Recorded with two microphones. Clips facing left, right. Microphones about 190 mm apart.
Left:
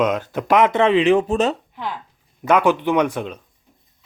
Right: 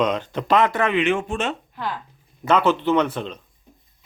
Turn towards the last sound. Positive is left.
turn(degrees=10)  # may be behind; listen again after turning